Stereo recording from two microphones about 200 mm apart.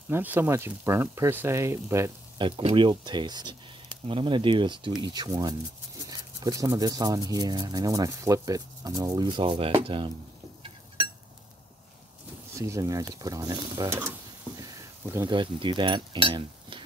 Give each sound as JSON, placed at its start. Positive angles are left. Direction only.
{"t": 0.1, "sound": "speech", "side_deg": -10}
{"t": 2.4, "sound": "speech", "side_deg": -25}
{"t": 12.5, "sound": "speech", "side_deg": -15}
{"t": 14.6, "sound": "frying", "side_deg": -15}
{"t": 15.3, "sound": "cutlery", "side_deg": -25}